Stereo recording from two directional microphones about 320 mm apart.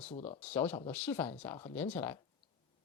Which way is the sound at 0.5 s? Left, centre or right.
Centre.